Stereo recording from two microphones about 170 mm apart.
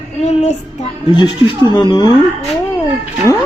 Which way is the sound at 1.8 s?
25° left (ahead or behind).